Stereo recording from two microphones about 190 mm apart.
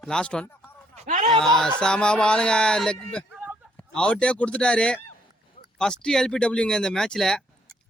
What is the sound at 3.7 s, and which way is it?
Speech, 5° left (ahead or behind).